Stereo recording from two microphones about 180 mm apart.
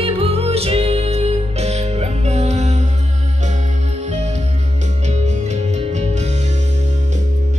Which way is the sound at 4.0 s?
40° right (ahead or behind).